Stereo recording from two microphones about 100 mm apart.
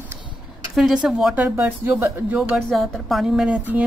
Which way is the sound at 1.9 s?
20° right (ahead or behind).